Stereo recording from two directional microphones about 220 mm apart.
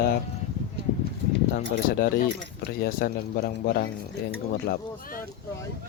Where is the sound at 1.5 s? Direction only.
40° left (ahead or behind).